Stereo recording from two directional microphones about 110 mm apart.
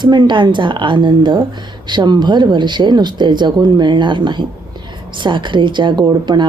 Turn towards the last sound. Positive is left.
turn(degrees=-40)  # may be behind; listen again after turning